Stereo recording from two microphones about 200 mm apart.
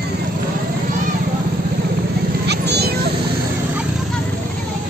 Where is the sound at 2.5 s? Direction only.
55° right (ahead or behind).